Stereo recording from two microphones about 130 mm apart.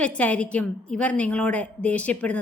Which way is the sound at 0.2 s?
10° left (ahead or behind).